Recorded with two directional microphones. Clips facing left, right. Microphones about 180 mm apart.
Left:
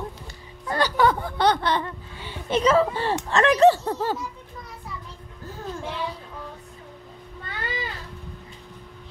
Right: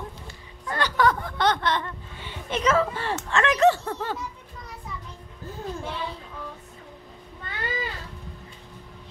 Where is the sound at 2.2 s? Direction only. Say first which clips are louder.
Left 4 dB; 30° left (ahead or behind).